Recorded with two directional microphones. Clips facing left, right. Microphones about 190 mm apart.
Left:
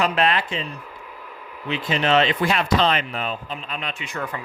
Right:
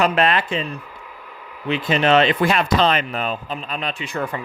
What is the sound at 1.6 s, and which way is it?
Speech, 55° right (ahead or behind).